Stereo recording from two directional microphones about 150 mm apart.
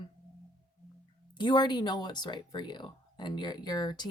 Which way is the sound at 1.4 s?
30° left (ahead or behind).